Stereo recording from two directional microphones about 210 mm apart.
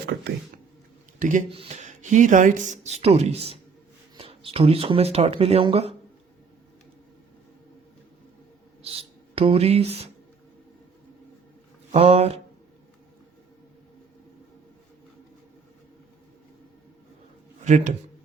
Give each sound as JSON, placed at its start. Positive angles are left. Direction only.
{"t": 1.2, "sound": "speech", "side_deg": -35}
{"t": 8.8, "sound": "speech", "side_deg": -25}
{"t": 11.9, "sound": "speech", "side_deg": -30}
{"t": 17.6, "sound": "speech", "side_deg": -35}